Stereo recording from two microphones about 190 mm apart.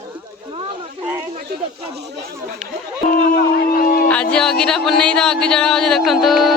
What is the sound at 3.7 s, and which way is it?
Speech, 50° left (ahead or behind).